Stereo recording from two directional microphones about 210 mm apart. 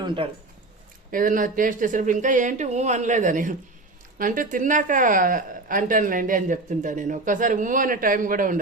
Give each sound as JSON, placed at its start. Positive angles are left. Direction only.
{"t": 0.0, "sound": "speech", "side_deg": -20}
{"t": 1.1, "sound": "a woman's voice", "side_deg": -40}